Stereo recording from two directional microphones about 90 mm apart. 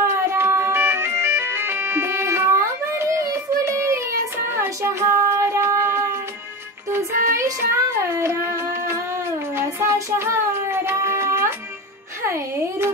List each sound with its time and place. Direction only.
0.0 s music: 30° right (ahead or behind)
4.5 s child singing: 30° right (ahead or behind)
8.2 s music: 30° right (ahead or behind)